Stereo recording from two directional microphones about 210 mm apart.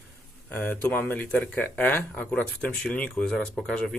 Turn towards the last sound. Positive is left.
turn(degrees=5)  # may be behind; listen again after turning